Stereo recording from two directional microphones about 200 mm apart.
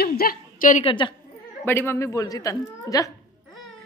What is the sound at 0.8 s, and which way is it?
Speech, 25° left (ahead or behind).